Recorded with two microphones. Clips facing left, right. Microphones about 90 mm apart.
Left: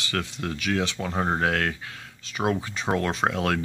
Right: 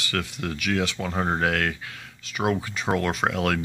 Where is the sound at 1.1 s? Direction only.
15° left (ahead or behind).